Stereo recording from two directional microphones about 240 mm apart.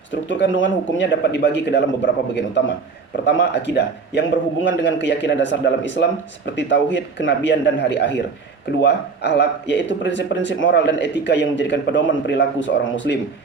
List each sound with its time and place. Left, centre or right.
0.1 s speech: left